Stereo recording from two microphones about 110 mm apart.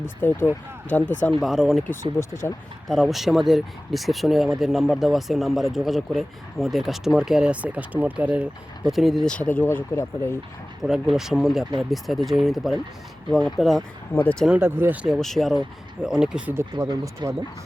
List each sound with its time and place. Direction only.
0.0 s speech: 20° left (ahead or behind)
1.4 s speech: centre (ahead or behind)
1.9 s speech: 25° left (ahead or behind)
2.8 s speech: centre (ahead or behind)
9.3 s speech: 15° left (ahead or behind)
10.8 s speech: 5° right (ahead or behind)
14.1 s speech: 20° left (ahead or behind)
14.6 s speech: 20° right (ahead or behind)
15.0 s speech: centre (ahead or behind)
16.7 s speech: 35° right (ahead or behind)